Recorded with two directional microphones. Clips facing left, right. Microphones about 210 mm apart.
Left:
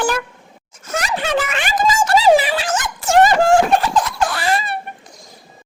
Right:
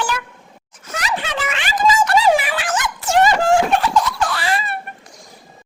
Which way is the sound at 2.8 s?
45° left (ahead or behind).